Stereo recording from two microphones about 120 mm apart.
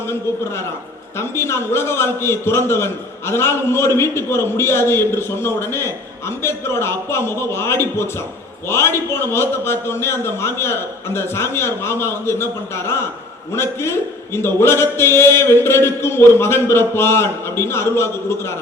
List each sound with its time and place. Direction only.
1.2 s a man's voice: 20° left (ahead or behind)